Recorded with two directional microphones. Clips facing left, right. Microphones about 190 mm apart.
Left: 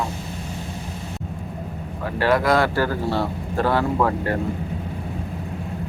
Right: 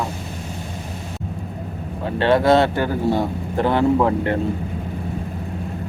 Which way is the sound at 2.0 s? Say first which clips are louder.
Right 3 dB; 25° right (ahead or behind).